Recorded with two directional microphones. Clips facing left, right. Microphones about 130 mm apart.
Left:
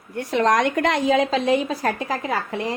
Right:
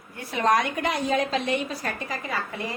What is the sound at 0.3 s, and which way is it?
A woman's voice, 85° left.